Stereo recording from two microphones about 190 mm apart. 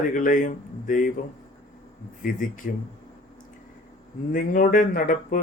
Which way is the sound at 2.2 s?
45° left (ahead or behind).